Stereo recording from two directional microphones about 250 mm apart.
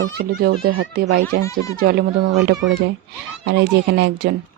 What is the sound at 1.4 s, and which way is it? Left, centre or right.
Speech, centre.